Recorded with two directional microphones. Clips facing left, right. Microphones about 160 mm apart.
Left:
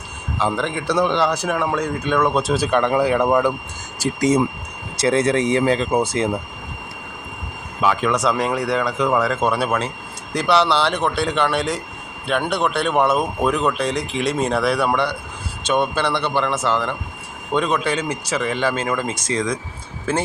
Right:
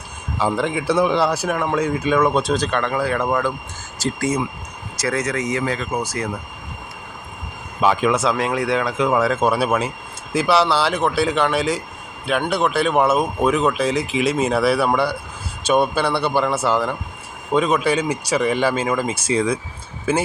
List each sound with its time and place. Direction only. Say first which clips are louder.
0.3 s speech: right 1 dB; 10° right (ahead or behind); by 6.4 s 25° left (ahead or behind)
8.0 s speech: right 1 dB; 5° right (ahead or behind)